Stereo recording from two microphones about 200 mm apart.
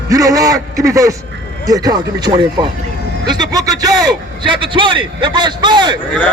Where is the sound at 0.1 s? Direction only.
15° right (ahead or behind).